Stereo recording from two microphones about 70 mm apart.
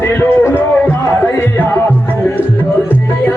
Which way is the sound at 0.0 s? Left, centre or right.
Left.